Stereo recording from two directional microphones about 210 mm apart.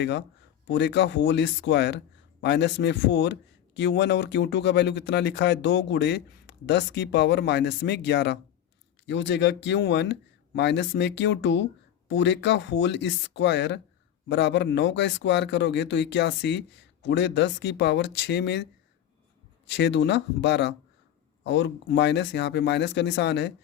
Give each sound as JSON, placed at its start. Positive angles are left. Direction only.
{"t": 0.0, "sound": "speech", "side_deg": 55}